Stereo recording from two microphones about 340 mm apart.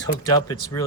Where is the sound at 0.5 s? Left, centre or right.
Centre.